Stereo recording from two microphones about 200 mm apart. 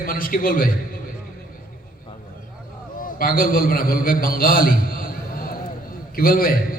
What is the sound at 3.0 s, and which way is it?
A man's voice, 45° left (ahead or behind).